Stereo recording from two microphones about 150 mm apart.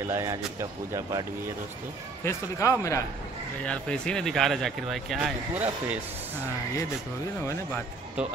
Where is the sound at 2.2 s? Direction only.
20° left (ahead or behind).